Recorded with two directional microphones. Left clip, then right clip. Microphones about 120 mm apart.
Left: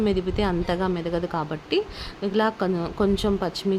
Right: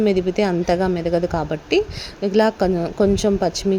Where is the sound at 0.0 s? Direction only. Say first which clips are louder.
Right 6 dB; 30° right (ahead or behind).